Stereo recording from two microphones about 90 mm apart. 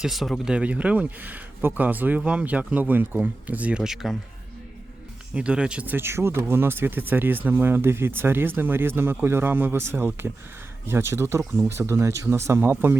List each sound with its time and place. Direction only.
0.0 s speech: centre (ahead or behind)
5.3 s speech: 15° right (ahead or behind)